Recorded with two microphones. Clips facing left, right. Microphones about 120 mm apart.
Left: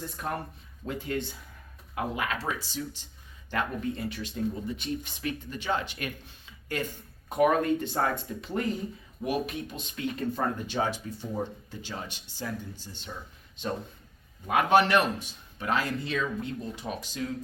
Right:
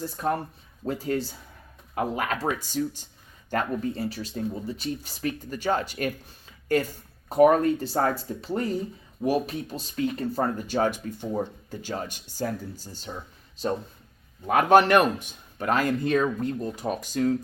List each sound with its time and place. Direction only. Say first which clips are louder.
0.0 s speech: right 6 dB; 30° right (ahead or behind)
7.3 s speech: right 5 dB; 35° right (ahead or behind)
14.4 s speech: right 4 dB; 45° right (ahead or behind)